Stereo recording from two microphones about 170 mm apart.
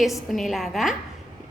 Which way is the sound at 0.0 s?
Centre (ahead or behind).